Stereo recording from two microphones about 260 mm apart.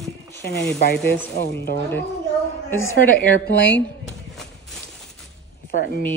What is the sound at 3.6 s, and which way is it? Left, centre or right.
Speech, left.